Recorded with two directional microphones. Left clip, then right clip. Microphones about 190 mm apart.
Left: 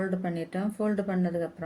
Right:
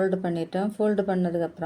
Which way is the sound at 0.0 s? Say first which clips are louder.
Right 6 dB; 15° right (ahead or behind).